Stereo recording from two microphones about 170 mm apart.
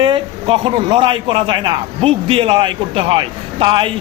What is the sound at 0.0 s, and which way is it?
A man's voice, 30° right (ahead or behind).